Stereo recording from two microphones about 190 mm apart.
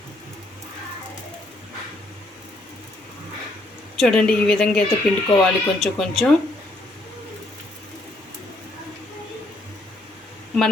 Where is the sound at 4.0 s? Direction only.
5° left (ahead or behind).